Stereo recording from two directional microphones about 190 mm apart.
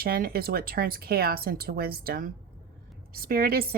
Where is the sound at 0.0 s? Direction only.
50° right (ahead or behind).